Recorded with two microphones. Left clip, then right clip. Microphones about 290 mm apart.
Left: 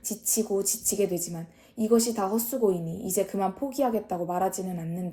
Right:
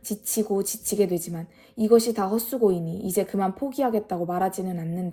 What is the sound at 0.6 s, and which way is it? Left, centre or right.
Speech, right.